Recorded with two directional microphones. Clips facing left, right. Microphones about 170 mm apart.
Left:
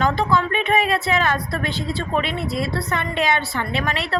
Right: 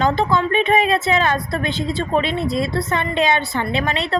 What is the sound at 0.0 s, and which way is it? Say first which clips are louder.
A woman's voice: right 2 dB; 20° right (ahead or behind).